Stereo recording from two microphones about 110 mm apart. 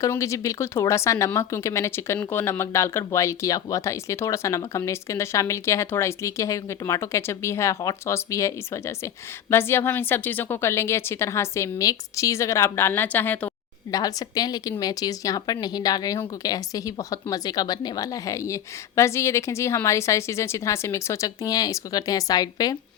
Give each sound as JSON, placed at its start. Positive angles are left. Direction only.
{"t": 0.1, "sound": "speech", "side_deg": 30}
{"t": 13.9, "sound": "a woman's voice", "side_deg": 35}